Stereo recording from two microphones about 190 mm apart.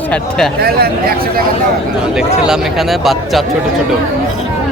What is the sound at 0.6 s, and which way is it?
Speech, 55° right (ahead or behind).